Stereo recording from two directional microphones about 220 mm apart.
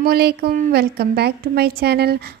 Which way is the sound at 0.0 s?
45° right (ahead or behind).